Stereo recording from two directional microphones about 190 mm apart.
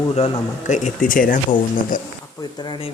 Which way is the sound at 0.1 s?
35° left (ahead or behind).